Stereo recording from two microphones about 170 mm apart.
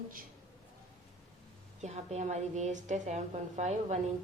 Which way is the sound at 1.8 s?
40° right (ahead or behind).